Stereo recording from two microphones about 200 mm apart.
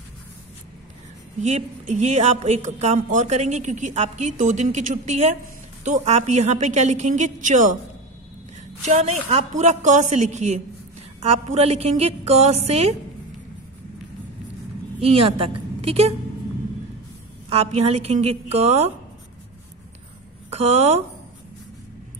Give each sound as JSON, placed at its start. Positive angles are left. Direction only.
{"t": 1.4, "sound": "a woman's voice", "side_deg": -35}
{"t": 8.8, "sound": "a woman's voice", "side_deg": -35}
{"t": 15.0, "sound": "a woman's voice", "side_deg": -30}
{"t": 17.5, "sound": "a woman's voice", "side_deg": -30}
{"t": 20.4, "sound": "speech", "side_deg": -30}